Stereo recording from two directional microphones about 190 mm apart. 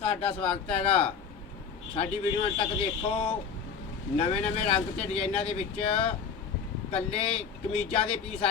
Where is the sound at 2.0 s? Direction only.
30° left (ahead or behind).